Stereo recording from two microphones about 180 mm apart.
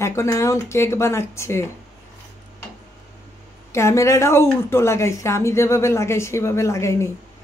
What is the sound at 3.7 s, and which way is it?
A woman's voice, 15° left (ahead or behind).